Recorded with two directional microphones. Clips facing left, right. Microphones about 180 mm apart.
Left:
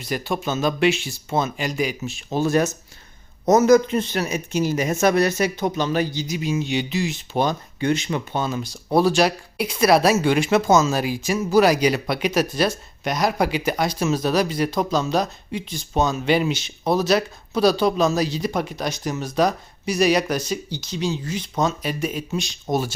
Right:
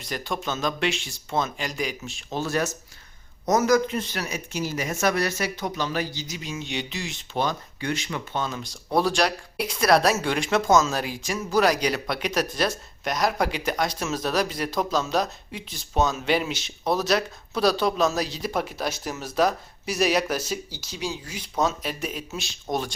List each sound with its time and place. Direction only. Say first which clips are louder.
0.0 s speech: left 5 dB; 5° left (ahead or behind)
2.4 s speech: left 7 dB; 20° left (ahead or behind); by 7.3 s 5° left (ahead or behind)
7.3 s speech: left 4 dB; 20° left (ahead or behind)
8.4 s speech: left 5 dB; 5° left (ahead or behind)